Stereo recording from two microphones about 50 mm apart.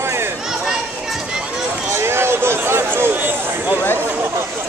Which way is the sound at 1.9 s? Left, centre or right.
Right.